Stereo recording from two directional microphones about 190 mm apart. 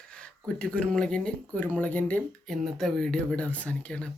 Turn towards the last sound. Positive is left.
turn(degrees=5)  # may be behind; listen again after turning